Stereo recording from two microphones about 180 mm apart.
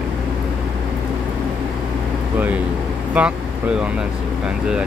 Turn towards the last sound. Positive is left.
turn(degrees=-5)  # may be behind; listen again after turning